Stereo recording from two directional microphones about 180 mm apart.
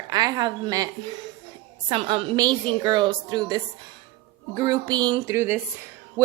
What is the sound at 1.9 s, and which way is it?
A woman's voice, 30° right (ahead or behind).